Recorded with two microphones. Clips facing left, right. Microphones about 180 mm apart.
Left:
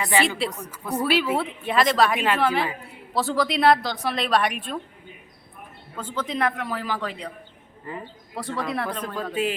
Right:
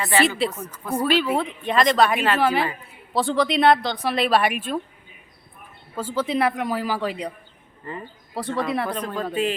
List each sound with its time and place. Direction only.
0.2 s a woman's voice: centre (ahead or behind)
0.5 s speech: 15° left (ahead or behind)
0.9 s a woman's voice: 5° left (ahead or behind)
6.0 s a man's voice: 10° right (ahead or behind)
7.9 s a woman's voice: 5° left (ahead or behind)
9.4 s speech: 10° left (ahead or behind)